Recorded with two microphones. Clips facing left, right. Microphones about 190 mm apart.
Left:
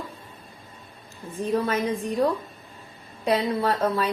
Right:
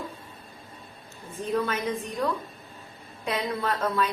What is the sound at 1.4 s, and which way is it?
Speech, 30° left (ahead or behind).